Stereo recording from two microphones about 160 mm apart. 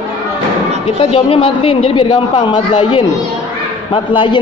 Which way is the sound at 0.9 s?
35° left (ahead or behind).